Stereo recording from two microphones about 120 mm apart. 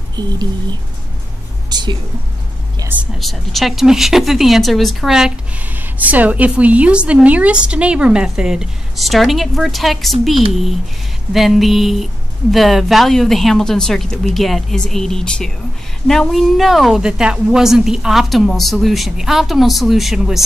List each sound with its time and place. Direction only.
0.1 s a woman's voice: 35° right (ahead or behind)
3.2 s a woman's voice: centre (ahead or behind)
11.3 s a woman's voice: centre (ahead or behind)